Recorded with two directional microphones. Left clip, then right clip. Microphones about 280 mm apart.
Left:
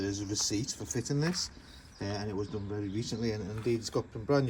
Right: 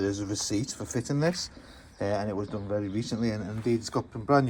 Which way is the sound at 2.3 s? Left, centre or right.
Right.